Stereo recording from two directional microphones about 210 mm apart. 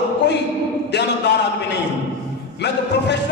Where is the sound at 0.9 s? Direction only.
55° left (ahead or behind).